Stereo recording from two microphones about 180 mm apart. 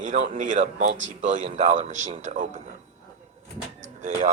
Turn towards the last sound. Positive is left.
turn(degrees=-40)  # may be behind; listen again after turning